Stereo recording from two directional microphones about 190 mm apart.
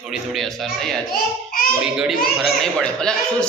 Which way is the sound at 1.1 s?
50° left (ahead or behind).